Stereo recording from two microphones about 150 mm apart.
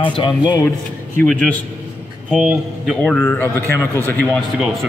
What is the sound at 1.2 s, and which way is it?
Speech, 5° left (ahead or behind).